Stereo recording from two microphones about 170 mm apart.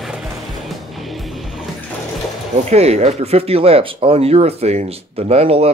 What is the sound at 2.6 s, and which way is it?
Speech, 40° right (ahead or behind).